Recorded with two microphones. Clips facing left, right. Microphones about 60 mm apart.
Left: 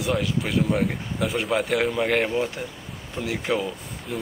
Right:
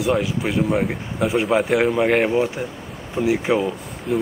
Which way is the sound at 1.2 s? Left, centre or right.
Centre.